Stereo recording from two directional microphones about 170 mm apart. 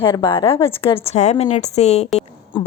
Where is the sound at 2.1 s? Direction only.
40° left (ahead or behind).